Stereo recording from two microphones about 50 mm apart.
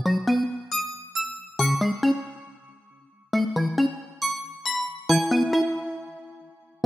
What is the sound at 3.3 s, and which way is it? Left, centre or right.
Music, centre.